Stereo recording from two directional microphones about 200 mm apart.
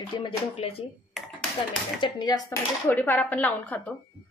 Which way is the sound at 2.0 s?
20° left (ahead or behind).